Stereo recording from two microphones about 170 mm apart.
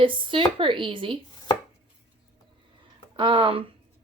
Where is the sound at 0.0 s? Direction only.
30° right (ahead or behind).